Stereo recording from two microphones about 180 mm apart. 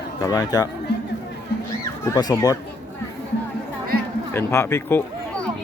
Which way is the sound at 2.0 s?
20° left (ahead or behind).